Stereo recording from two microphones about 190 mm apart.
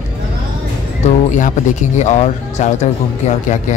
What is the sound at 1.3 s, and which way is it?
Speech, 40° left (ahead or behind).